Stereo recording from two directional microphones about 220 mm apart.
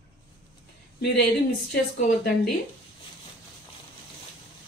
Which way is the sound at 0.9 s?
50° left (ahead or behind).